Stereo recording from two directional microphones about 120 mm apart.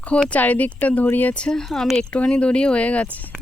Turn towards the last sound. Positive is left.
turn(degrees=10)  # may be behind; listen again after turning